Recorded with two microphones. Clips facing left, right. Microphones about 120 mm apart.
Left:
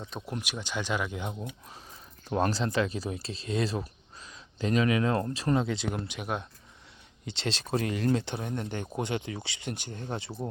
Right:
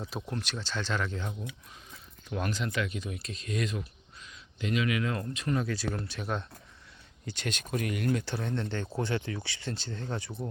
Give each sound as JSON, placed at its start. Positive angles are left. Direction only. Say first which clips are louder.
{"t": 0.0, "sound": "speech", "louder": "right 2 dB", "side_deg": -5}
{"t": 0.3, "sound": "speech", "louder": "even", "side_deg": 10}
{"t": 2.3, "sound": "speech", "louder": "left 5 dB", "side_deg": 35}
{"t": 7.3, "sound": "speech", "louder": "left 3 dB", "side_deg": 30}